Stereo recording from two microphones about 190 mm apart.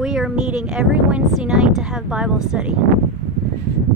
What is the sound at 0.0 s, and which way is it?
Speech, centre (ahead or behind).